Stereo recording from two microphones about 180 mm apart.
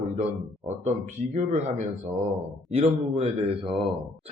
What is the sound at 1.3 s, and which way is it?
Speech, 40° right (ahead or behind).